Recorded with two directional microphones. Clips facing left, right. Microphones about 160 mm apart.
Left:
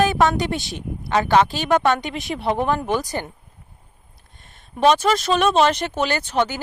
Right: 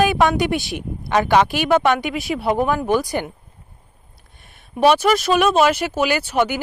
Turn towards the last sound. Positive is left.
turn(degrees=-10)  # may be behind; listen again after turning